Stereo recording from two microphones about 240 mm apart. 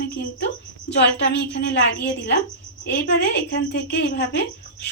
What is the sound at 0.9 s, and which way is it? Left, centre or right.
A woman's voice, left.